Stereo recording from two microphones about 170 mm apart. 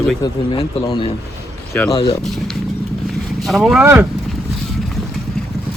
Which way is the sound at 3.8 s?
15° right (ahead or behind).